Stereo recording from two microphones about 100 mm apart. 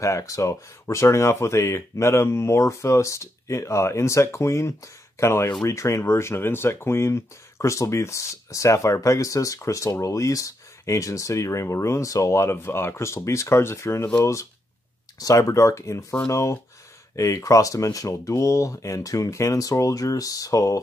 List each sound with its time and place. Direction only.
0.0 s speech: 30° left (ahead or behind)
15.1 s speech: 35° left (ahead or behind)